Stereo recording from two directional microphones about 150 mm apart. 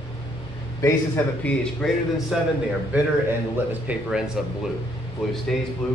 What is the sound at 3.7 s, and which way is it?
Speech, 5° right (ahead or behind).